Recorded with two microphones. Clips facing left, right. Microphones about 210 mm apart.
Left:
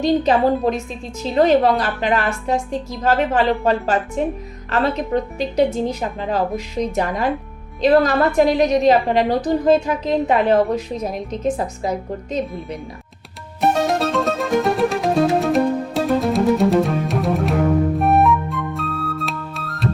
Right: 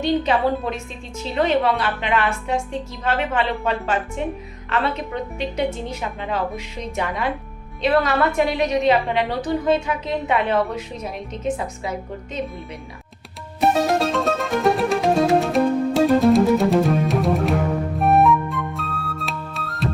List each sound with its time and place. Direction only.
0.0 s a woman's voice: 35° left (ahead or behind)
13.6 s music: centre (ahead or behind)